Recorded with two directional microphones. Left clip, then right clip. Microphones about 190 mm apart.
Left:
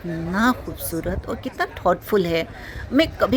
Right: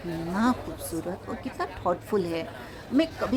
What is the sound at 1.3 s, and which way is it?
A woman's voice, 15° left (ahead or behind).